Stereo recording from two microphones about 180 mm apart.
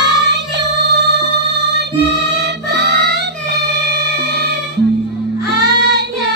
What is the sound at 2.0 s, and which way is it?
Music, 75° right (ahead or behind).